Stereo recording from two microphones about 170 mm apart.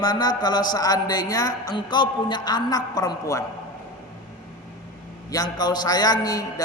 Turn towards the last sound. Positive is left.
turn(degrees=20)  # may be behind; listen again after turning